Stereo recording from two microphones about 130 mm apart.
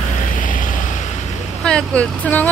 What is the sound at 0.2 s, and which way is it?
Vehicle, 85° left.